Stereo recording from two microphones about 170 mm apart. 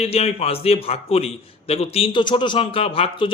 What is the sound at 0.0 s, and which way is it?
A man's voice, 35° left (ahead or behind).